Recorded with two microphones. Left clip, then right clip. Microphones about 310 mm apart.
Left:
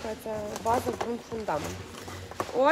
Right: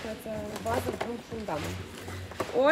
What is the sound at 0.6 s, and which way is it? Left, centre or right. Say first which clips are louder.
Speech: left 4 dB; centre.